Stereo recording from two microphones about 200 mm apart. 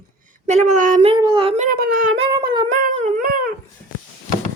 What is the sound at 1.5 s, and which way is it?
Speech, 45° right (ahead or behind).